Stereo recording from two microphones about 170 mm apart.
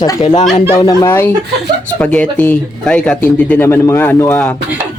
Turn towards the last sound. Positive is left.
turn(degrees=10)  # may be behind; listen again after turning